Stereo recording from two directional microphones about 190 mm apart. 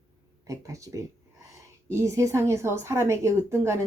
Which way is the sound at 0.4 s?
15° right (ahead or behind).